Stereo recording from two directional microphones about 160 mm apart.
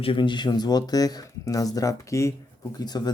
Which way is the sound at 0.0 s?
30° left (ahead or behind).